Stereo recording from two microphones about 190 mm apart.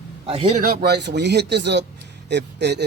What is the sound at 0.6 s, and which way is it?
Speech, 50° right (ahead or behind).